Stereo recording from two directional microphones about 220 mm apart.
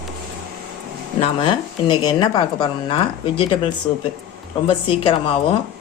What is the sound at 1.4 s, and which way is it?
Speech, 20° left (ahead or behind).